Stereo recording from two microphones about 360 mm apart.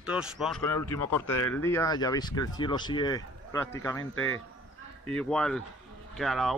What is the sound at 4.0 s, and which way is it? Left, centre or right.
Speech, left.